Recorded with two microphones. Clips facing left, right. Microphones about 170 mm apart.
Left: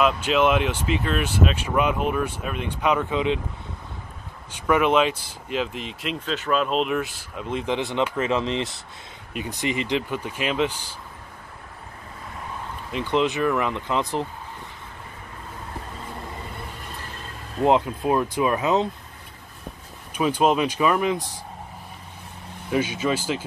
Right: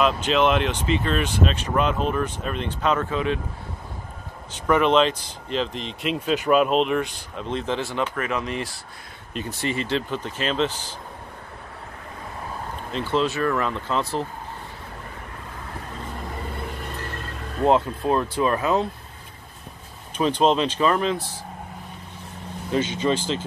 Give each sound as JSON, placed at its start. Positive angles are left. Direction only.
{"t": 0.0, "sound": "speech", "side_deg": 10}
{"t": 4.6, "sound": "speech", "side_deg": 10}
{"t": 6.2, "sound": "speech", "side_deg": -10}
{"t": 6.8, "sound": "speech", "side_deg": 5}
{"t": 12.9, "sound": "speech", "side_deg": 15}
{"t": 17.6, "sound": "speech", "side_deg": 15}
{"t": 20.2, "sound": "speech", "side_deg": 10}
{"t": 22.7, "sound": "speech", "side_deg": 10}